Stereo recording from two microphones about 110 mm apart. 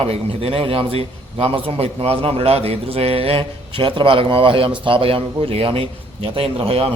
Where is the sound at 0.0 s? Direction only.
60° right (ahead or behind).